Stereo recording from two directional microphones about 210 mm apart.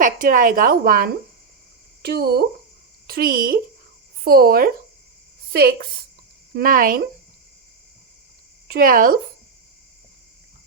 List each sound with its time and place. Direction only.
0.0 s a woman's voice: 40° right (ahead or behind)
8.6 s speech: 45° right (ahead or behind)